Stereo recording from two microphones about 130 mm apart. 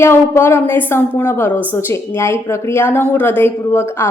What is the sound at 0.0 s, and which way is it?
Speech, 20° left (ahead or behind).